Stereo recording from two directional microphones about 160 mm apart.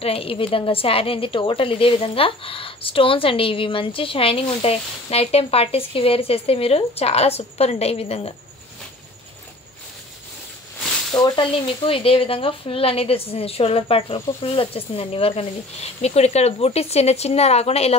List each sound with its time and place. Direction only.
0.0 s a woman's voice: 35° left (ahead or behind)
11.1 s a woman's voice: 25° left (ahead or behind)